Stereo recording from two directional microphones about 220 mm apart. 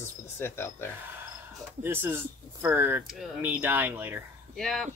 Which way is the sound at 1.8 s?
10° right (ahead or behind).